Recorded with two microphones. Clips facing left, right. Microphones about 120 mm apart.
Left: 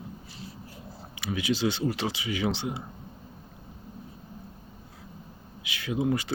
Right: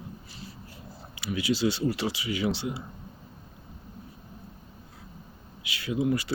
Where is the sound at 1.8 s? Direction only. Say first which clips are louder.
Right 1 dB; 20° left (ahead or behind).